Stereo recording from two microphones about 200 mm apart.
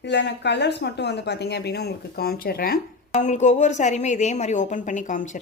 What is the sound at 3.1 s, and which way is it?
A woman's voice, 35° left (ahead or behind).